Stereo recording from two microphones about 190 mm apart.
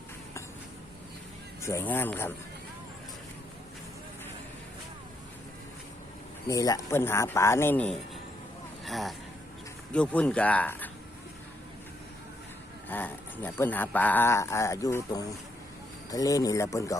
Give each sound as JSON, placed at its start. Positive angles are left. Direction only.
{"t": 1.6, "sound": "speech", "side_deg": 10}
{"t": 6.5, "sound": "speech", "side_deg": 15}
{"t": 12.9, "sound": "speech", "side_deg": 10}